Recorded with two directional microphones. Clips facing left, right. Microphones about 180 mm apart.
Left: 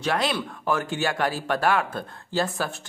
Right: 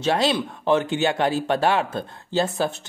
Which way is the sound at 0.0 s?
25° right (ahead or behind).